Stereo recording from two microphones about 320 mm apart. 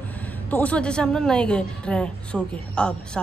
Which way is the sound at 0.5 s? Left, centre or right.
Centre.